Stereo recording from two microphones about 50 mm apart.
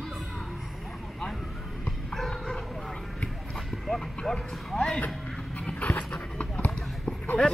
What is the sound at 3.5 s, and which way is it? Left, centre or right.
Clip-clop, centre.